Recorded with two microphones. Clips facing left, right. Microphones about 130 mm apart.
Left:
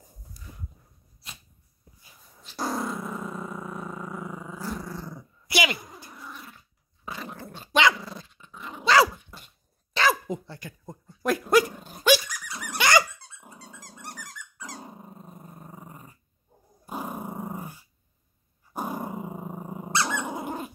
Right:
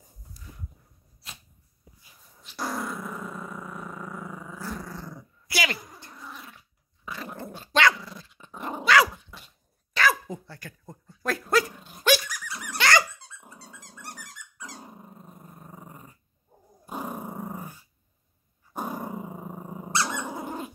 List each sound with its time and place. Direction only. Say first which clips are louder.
2.4 s dog: left 2 dB; 25° left (ahead or behind); by 5.2 s 10° left (ahead or behind)
5.5 s a sound: left 3 dB; 15° left (ahead or behind)
6.2 s dog: right 1 dB; centre (ahead or behind)
7.6 s dog: left 1 dB; 15° left (ahead or behind)
8.0 s dog: left 3 dB; 30° left (ahead or behind)
8.5 s dog: right 7 dB; 50° right (ahead or behind)
8.8 s dog: left 1 dB; 30° left (ahead or behind)
14.8 s dog: left 2 dB; 20° left (ahead or behind)
15.4 s dog: left 1 dB; 5° left (ahead or behind)
19.9 s dog: left 1 dB; 20° left (ahead or behind)